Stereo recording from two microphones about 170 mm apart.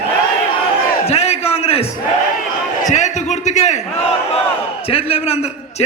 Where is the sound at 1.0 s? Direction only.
40° left (ahead or behind).